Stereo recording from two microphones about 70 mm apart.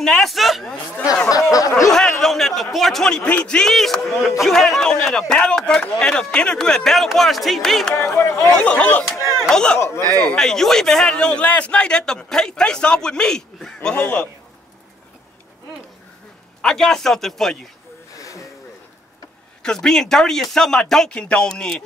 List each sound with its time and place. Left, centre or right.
0.0 s speech: centre
1.3 s a sound: left
1.9 s a man's voice: centre
7.9 s speech: left
8.5 s a man's voice: centre
9.8 s speech: left
10.0 s speech: right
10.3 s a man's voice: centre
13.9 s speech: left
16.6 s a man's voice: centre
18.1 s a sound: left
19.6 s a man's voice: centre